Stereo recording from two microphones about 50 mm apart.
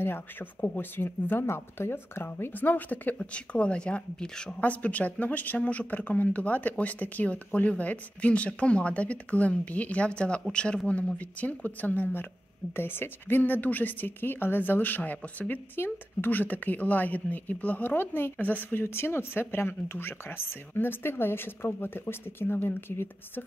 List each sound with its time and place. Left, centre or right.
0.0 s a woman's voice: left
2.5 s a woman's voice: left
3.2 s speech: left
4.6 s speech: left
11.1 s a woman's voice: left